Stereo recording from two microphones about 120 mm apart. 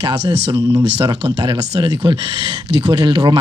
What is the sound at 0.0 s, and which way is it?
Speech, 35° right (ahead or behind).